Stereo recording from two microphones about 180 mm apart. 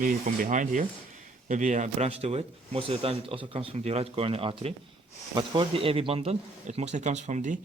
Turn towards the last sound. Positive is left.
turn(degrees=-45)  # may be behind; listen again after turning